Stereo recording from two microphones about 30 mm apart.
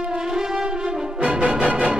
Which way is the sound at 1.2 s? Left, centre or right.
Right.